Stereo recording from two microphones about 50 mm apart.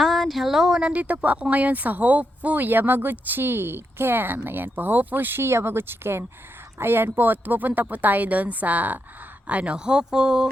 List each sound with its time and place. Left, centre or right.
0.0 s a sound: centre
0.8 s speech: right
5.4 s speech: right; by 10.5 s centre